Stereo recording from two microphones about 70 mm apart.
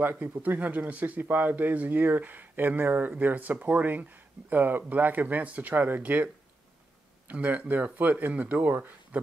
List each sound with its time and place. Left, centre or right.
0.0 s speech: right